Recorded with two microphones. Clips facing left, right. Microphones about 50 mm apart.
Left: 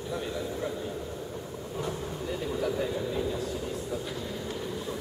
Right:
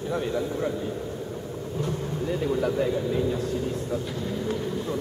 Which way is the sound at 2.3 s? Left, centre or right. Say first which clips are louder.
Right 5 dB; centre.